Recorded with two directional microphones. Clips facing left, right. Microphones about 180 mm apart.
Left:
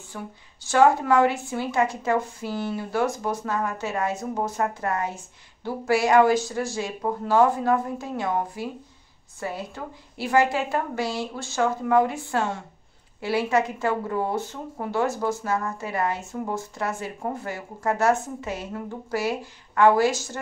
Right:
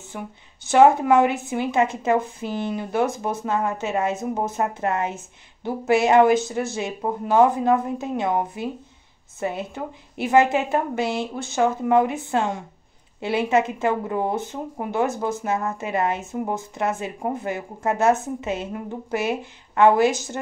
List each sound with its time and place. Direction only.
0.1 s a woman's voice: 20° right (ahead or behind)